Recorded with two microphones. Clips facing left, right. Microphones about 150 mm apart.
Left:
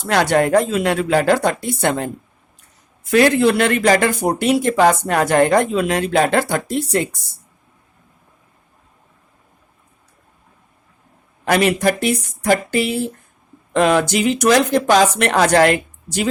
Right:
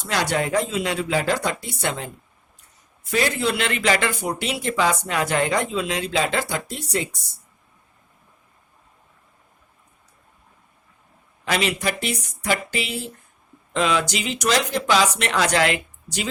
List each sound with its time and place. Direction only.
0.0 s speech: 55° left (ahead or behind)
3.1 s speech: 60° left (ahead or behind)
11.4 s speech: 50° left (ahead or behind)